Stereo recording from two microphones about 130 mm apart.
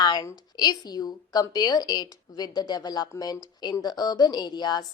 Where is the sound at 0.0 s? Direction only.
35° left (ahead or behind).